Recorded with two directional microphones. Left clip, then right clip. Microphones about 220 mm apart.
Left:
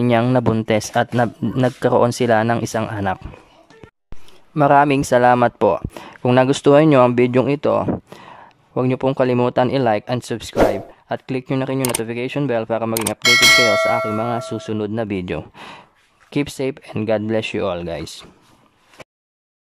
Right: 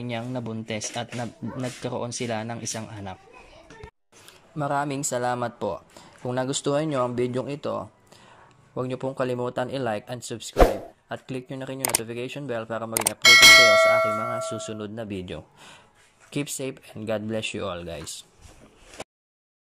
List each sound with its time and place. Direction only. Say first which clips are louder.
0.1 s speech: left 15 dB; 35° left (ahead or behind)
4.6 s speech: left 14 dB; 35° left (ahead or behind)
12.9 s clang: right 1 dB; centre (ahead or behind)
14.3 s speech: left 6 dB; 25° left (ahead or behind)